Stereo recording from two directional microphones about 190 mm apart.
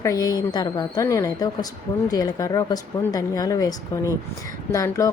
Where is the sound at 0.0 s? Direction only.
20° left (ahead or behind).